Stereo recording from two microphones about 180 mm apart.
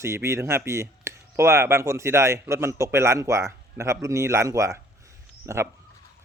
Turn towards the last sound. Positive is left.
turn(degrees=-15)  # may be behind; listen again after turning